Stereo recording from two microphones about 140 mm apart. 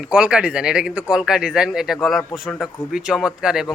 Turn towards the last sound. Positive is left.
turn(degrees=-5)  # may be behind; listen again after turning